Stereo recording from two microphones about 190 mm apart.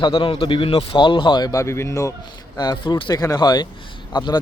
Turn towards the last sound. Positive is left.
turn(degrees=20)  # may be behind; listen again after turning